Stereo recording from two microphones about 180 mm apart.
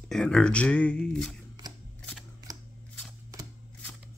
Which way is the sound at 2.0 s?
5° left (ahead or behind).